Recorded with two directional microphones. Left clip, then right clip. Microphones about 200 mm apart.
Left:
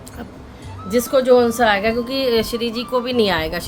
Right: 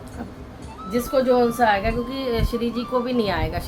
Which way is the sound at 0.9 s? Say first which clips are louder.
Left 5 dB; 45° left (ahead or behind).